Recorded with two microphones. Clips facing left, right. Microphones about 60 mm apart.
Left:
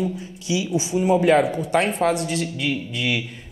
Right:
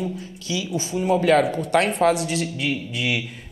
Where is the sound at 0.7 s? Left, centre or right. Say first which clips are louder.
Left 2 dB; centre.